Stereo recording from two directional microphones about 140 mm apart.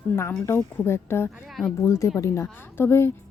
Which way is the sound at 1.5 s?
Centre (ahead or behind).